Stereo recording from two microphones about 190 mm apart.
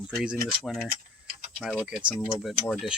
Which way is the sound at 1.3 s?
50° right (ahead or behind).